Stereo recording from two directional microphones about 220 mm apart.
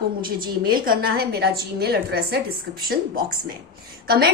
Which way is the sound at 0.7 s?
45° right (ahead or behind).